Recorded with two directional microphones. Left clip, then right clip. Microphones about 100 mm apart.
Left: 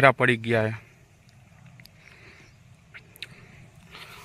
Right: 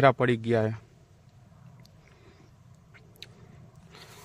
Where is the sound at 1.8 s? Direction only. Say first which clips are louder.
Left 11 dB; centre (ahead or behind).